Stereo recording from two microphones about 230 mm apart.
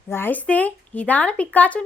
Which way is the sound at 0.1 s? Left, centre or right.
Centre.